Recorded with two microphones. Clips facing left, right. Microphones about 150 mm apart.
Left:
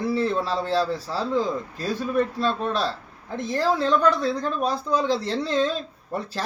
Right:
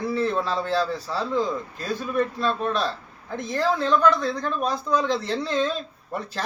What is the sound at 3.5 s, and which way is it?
Speech, 35° left (ahead or behind).